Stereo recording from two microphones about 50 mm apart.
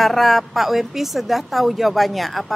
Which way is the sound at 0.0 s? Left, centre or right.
Centre.